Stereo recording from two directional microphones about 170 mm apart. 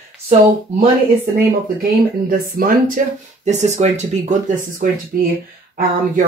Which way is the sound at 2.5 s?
55° right (ahead or behind).